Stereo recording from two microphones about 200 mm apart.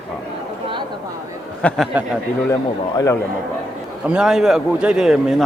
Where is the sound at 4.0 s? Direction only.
5° right (ahead or behind).